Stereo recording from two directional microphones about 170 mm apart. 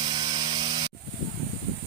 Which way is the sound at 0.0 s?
25° right (ahead or behind).